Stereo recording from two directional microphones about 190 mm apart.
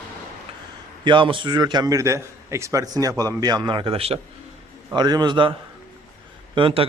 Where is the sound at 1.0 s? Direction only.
25° right (ahead or behind).